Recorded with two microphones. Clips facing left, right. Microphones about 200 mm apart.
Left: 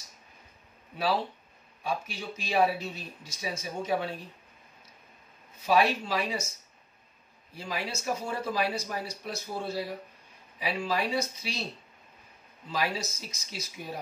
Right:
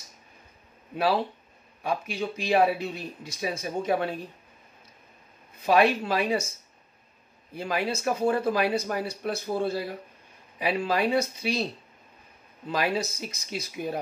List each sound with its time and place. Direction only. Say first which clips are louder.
0.9 s speech: right 4 dB; 55° right (ahead or behind)
5.7 s speech: right 4 dB; 55° right (ahead or behind)
7.5 s speech: right 7 dB; 55° right (ahead or behind)
12.6 s speech: right 5 dB; 55° right (ahead or behind)